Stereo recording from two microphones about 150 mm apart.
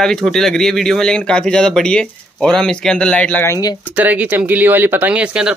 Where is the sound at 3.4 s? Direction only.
20° left (ahead or behind).